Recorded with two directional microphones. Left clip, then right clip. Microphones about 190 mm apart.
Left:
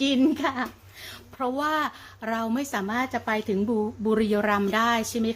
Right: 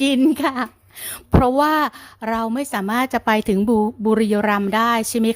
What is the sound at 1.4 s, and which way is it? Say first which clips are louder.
A woman's voice: right 9 dB; 50° right (ahead or behind).